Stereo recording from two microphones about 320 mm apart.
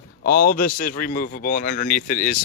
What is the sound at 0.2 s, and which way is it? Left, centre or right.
Speech, left.